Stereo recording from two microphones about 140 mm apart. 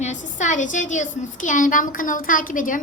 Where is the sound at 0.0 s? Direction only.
60° left (ahead or behind).